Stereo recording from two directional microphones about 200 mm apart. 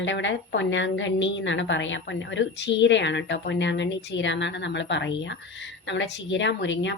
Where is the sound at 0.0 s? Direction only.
65° left (ahead or behind).